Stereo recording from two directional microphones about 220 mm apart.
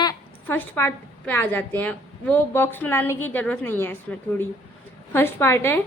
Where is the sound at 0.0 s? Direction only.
10° left (ahead or behind).